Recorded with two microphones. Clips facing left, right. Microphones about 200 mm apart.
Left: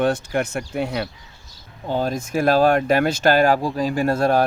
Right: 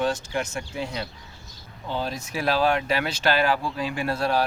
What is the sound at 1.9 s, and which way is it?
Speech, 50° left (ahead or behind).